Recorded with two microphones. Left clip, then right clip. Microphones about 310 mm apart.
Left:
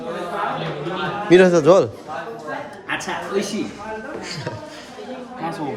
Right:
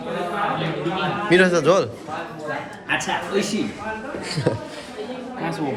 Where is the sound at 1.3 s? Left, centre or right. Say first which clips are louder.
Left 4 dB; left.